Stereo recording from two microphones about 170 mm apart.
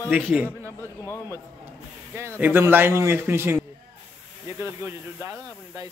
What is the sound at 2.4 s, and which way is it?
A man's voice, 10° right (ahead or behind).